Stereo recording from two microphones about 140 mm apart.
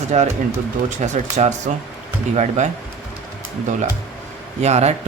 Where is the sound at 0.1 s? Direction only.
55° right (ahead or behind).